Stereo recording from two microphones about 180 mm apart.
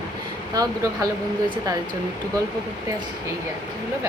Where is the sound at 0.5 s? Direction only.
20° right (ahead or behind).